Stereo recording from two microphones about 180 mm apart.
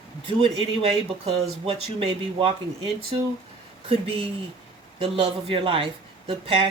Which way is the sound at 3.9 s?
30° right (ahead or behind).